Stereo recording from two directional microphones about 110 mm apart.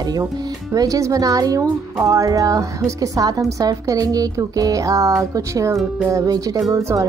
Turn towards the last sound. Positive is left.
turn(degrees=-30)  # may be behind; listen again after turning